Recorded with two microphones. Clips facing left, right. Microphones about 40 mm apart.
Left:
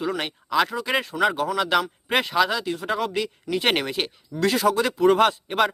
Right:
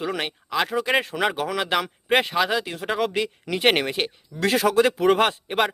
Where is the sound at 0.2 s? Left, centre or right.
Centre.